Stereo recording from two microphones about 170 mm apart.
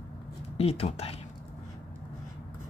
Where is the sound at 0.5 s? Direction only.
35° left (ahead or behind).